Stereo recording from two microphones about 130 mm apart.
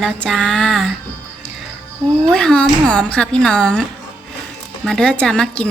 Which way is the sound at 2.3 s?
5° left (ahead or behind).